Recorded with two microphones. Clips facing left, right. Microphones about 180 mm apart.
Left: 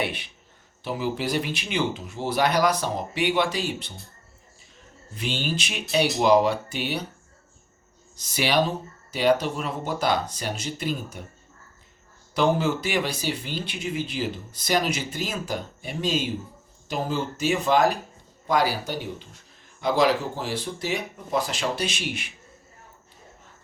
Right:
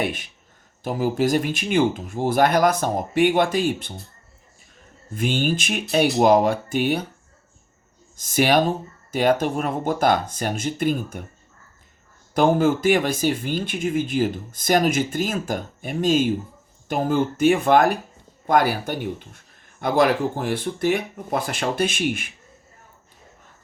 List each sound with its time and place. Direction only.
0.0 s speech: 45° right (ahead or behind)
5.1 s speech: 50° right (ahead or behind)
8.1 s speech: 50° right (ahead or behind)
12.3 s speech: 50° right (ahead or behind)